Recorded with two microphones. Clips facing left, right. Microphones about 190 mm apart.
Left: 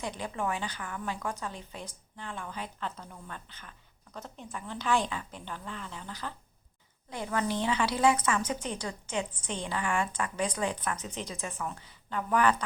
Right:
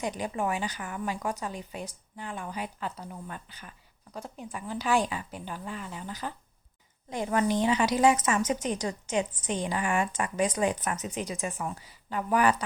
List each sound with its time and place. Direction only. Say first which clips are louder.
0.2 s a woman's voice: right 3 dB; 15° right (ahead or behind)
8.7 s a woman's voice: right 5 dB; 40° right (ahead or behind)
9.5 s a woman's voice: right 2 dB; 15° right (ahead or behind)